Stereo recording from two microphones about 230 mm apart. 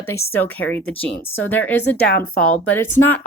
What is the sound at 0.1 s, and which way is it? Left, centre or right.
Speech, centre.